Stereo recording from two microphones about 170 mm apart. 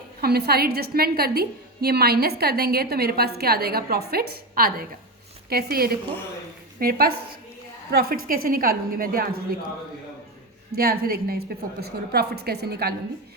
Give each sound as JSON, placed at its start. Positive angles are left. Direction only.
{"t": 0.2, "sound": "a woman's voice", "side_deg": -65}
{"t": 10.8, "sound": "a woman's voice", "side_deg": -65}